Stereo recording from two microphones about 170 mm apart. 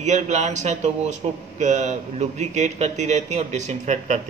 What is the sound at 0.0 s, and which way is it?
Speech, 40° right (ahead or behind).